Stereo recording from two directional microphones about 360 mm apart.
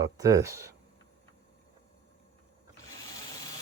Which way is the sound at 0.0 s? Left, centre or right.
Centre.